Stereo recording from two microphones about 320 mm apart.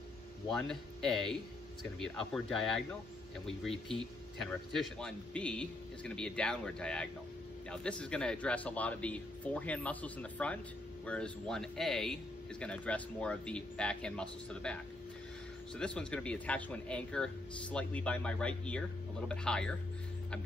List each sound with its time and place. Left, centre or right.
0.5 s a man's voice: centre
15.8 s a man's voice: centre